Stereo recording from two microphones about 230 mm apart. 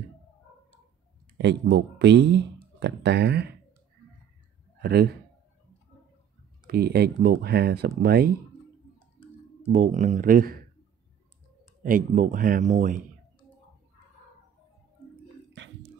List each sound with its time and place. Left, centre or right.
1.4 s speech: right
4.8 s speech: right
6.7 s speech: right
9.7 s speech: right
11.8 s speech: right